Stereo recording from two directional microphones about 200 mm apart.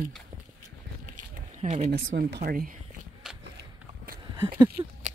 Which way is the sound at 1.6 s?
30° right (ahead or behind).